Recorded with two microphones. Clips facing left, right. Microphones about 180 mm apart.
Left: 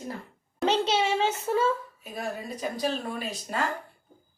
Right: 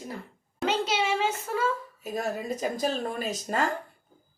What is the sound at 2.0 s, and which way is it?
Speech, 40° right (ahead or behind).